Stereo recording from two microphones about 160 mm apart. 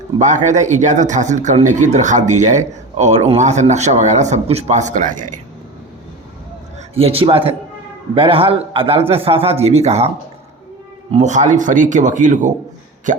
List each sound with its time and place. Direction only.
0.2 s speech: 50° right (ahead or behind)
6.9 s a man's voice: 40° right (ahead or behind)
11.1 s speech: 45° right (ahead or behind)
13.1 s a sound: 50° right (ahead or behind)